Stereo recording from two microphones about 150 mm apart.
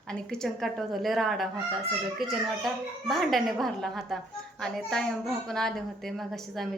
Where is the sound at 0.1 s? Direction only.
5° left (ahead or behind).